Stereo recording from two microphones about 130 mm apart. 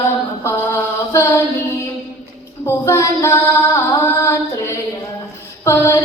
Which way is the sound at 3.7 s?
20° left (ahead or behind).